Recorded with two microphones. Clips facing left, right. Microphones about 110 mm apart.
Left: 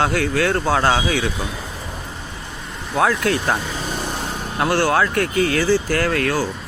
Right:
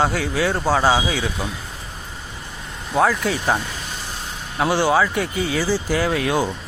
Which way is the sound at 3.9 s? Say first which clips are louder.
Left 7 dB; 60° left (ahead or behind).